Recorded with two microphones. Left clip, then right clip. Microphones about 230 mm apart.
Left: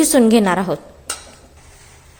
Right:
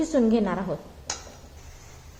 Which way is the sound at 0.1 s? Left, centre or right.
Left.